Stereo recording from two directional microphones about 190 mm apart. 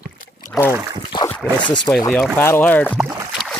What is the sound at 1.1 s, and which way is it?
Dog, 25° left (ahead or behind).